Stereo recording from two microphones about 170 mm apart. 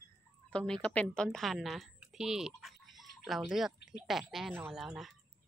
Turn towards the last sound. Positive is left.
turn(degrees=0)  # may be behind; listen again after turning